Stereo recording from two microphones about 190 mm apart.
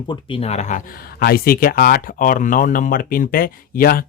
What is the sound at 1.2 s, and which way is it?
Speech, 55° left (ahead or behind).